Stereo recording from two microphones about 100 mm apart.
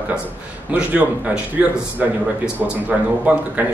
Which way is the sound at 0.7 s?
15° right (ahead or behind).